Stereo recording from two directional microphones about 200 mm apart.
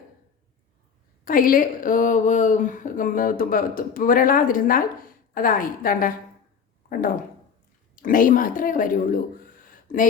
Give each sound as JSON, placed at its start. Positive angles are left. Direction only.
{"t": 1.2, "sound": "speech", "side_deg": 45}
{"t": 8.0, "sound": "speech", "side_deg": 45}
{"t": 9.6, "sound": "a sound", "side_deg": 45}